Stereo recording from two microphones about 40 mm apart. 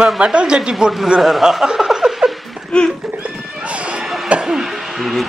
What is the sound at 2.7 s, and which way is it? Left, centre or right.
Speech, left.